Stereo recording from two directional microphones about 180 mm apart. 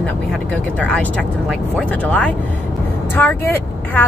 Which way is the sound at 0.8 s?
5° left (ahead or behind).